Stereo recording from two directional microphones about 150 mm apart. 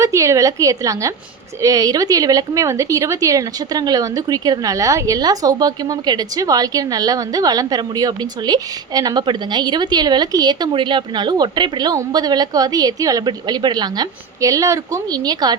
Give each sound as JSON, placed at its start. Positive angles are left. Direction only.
{"t": 0.0, "sound": "a woman's voice", "side_deg": -20}